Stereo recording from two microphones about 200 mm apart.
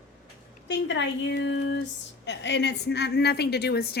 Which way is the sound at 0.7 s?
60° left (ahead or behind).